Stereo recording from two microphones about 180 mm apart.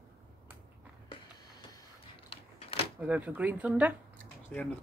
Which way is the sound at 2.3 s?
30° left (ahead or behind).